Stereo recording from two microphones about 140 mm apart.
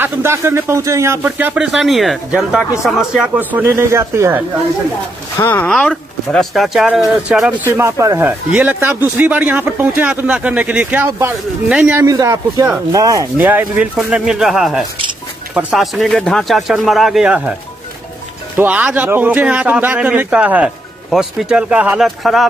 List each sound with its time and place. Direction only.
0.0 s a man's voice: 20° right (ahead or behind); by 3.3 s 5° right (ahead or behind)
3.3 s speech: 15° right (ahead or behind)
5.4 s speech: 15° left (ahead or behind); by 7.5 s 5° right (ahead or behind)
7.6 s a man's voice: 20° right (ahead or behind)
12.1 s a man's voice: 25° right (ahead or behind); by 17.6 s 5° right (ahead or behind)
18.6 s a man's voice: 10° right (ahead or behind)